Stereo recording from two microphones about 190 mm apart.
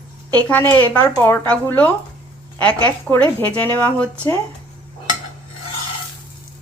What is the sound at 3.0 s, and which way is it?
Speech, 10° left (ahead or behind).